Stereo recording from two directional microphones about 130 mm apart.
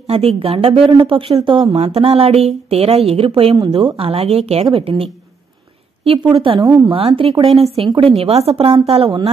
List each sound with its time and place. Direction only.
0.0 s speech: 50° right (ahead or behind)
6.1 s a woman's voice: 40° right (ahead or behind)